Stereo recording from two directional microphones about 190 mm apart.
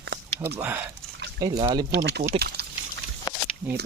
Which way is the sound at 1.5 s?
20° right (ahead or behind).